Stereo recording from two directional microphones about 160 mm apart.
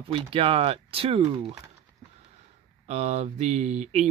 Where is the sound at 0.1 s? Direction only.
35° right (ahead or behind).